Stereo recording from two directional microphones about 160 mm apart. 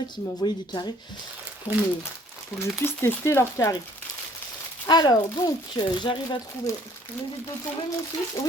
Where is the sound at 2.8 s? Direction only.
15° left (ahead or behind).